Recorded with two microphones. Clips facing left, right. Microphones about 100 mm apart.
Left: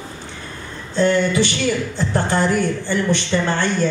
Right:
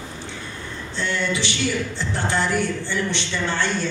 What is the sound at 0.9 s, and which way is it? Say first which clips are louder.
A man's voice: left 9 dB; 45° left (ahead or behind).